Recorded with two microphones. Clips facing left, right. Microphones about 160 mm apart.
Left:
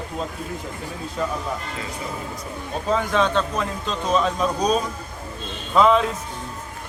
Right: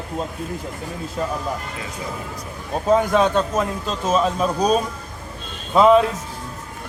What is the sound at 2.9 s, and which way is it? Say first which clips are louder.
Speech: right 4 dB; 45° right (ahead or behind).